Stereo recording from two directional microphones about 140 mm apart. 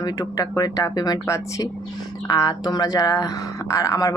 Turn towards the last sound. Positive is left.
turn(degrees=25)  # may be behind; listen again after turning